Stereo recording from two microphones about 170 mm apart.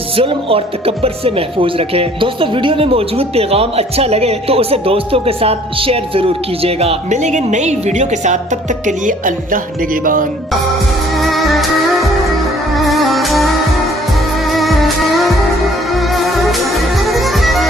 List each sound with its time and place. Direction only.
0.2 s speech: 35° right (ahead or behind)
8.9 s music: 50° right (ahead or behind)
11.2 s music: centre (ahead or behind)